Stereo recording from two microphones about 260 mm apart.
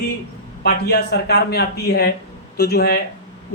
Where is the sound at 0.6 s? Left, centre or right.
Left.